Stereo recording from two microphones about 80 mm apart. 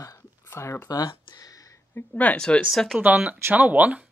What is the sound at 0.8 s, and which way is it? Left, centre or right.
Speech, left.